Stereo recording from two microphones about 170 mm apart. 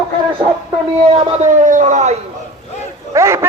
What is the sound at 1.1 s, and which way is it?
A man's voice, 40° right (ahead or behind).